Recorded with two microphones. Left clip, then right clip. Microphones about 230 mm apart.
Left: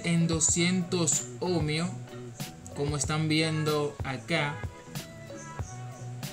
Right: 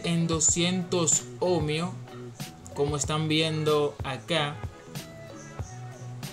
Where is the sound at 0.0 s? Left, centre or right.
Centre.